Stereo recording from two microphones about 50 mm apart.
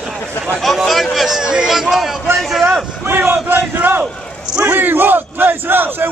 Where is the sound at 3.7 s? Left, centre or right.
Right.